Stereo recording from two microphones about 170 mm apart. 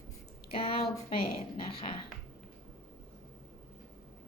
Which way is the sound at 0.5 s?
35° left (ahead or behind).